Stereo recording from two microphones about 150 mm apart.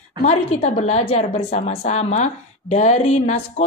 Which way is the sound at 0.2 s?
50° left (ahead or behind).